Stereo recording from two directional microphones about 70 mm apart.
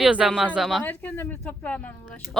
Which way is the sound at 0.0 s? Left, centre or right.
Centre.